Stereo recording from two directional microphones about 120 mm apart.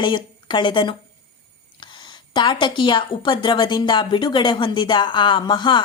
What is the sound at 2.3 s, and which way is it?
A woman's voice, 40° left (ahead or behind).